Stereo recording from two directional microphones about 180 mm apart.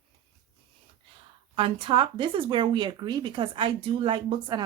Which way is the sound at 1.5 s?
30° right (ahead or behind).